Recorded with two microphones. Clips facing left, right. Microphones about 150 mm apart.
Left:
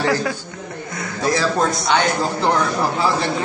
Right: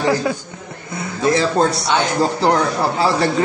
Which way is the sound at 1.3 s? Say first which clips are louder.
Right 3 dB; 25° right (ahead or behind).